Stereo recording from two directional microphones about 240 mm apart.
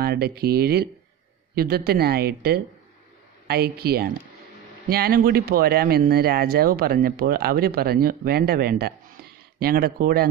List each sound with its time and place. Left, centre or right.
0.0 s speech: right